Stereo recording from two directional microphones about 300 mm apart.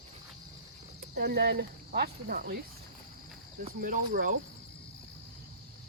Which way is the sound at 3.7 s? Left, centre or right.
Right.